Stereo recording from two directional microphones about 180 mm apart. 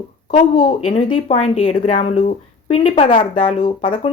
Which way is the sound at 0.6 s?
40° left (ahead or behind).